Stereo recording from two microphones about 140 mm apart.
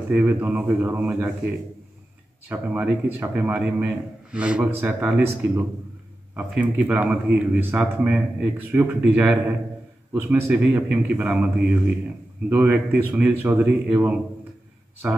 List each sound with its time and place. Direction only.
0.1 s a man's voice: 10° right (ahead or behind)
12.4 s a man's voice: 10° right (ahead or behind)